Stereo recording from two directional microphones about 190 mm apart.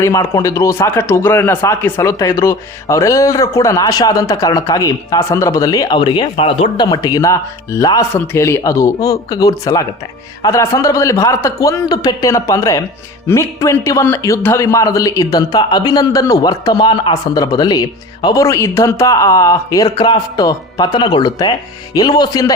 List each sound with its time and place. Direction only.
0.0 s a man's voice: 15° left (ahead or behind)